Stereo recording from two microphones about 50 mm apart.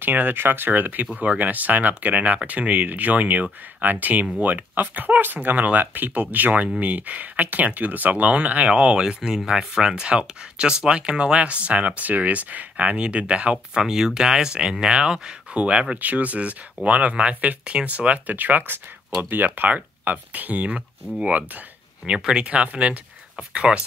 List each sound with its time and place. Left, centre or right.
0.0 s speech: right